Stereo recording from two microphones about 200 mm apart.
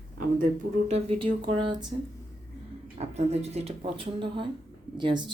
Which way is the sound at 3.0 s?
30° right (ahead or behind).